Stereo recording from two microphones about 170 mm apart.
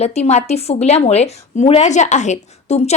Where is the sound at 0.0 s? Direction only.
40° left (ahead or behind).